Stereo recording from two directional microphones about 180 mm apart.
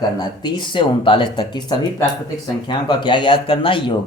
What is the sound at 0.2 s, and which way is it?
Speech, 25° left (ahead or behind).